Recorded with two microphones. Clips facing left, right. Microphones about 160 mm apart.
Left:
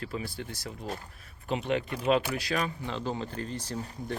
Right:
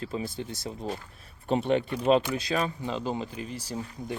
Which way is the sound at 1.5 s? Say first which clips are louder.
Right 4 dB; 35° right (ahead or behind).